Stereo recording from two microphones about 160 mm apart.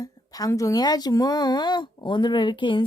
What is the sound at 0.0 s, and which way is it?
Speech, 25° left (ahead or behind).